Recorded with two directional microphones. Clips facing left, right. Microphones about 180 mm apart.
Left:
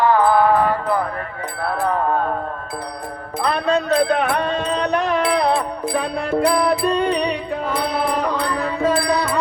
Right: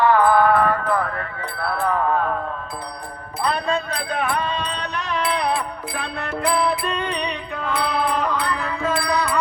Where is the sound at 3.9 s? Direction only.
60° left (ahead or behind).